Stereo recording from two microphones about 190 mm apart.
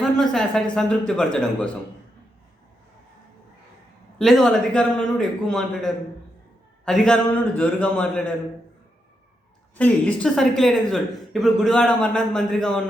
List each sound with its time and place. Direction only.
0.0 s speech: centre (ahead or behind)
4.2 s speech: centre (ahead or behind)
9.7 s speech: 5° left (ahead or behind)